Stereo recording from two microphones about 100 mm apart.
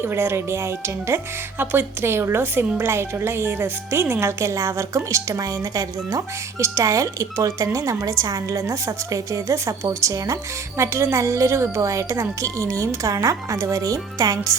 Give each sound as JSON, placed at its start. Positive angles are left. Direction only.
{"t": 0.0, "sound": "speech", "side_deg": -25}